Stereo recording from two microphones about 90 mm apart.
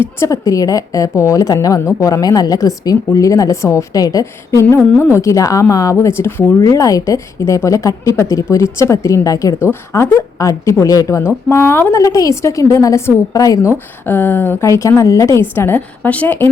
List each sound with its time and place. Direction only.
0.0 s a woman's voice: 35° left (ahead or behind)
4.9 s a woman's voice: 30° left (ahead or behind)
6.6 s a woman's voice: 40° left (ahead or behind)
14.0 s a woman's voice: 25° left (ahead or behind)
15.4 s a woman's voice: 25° left (ahead or behind)